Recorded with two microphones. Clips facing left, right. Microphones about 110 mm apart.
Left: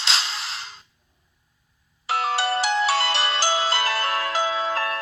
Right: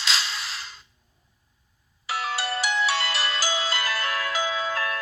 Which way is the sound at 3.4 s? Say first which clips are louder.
Left 5 dB; 50° left (ahead or behind).